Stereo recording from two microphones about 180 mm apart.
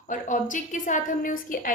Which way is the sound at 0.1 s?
45° left (ahead or behind).